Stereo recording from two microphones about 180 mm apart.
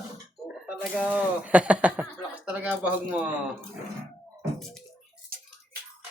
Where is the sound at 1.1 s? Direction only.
10° right (ahead or behind).